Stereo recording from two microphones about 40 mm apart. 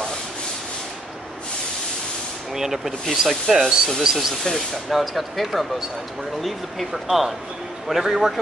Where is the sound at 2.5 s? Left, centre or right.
Centre.